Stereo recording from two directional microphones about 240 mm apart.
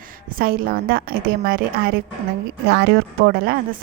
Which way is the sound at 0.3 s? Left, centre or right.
Right.